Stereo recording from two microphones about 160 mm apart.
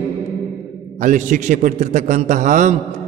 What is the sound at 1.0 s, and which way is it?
A man's voice, 55° right (ahead or behind).